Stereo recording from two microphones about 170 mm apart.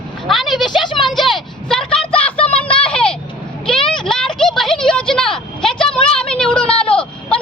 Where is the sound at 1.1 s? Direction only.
Centre (ahead or behind).